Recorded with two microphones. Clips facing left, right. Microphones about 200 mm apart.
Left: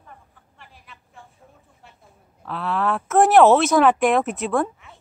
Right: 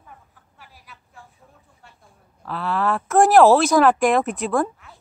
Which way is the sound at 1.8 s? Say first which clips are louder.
Left 1 dB; centre (ahead or behind).